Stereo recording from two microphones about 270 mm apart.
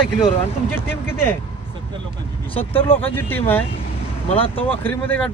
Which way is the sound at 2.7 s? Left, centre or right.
Centre.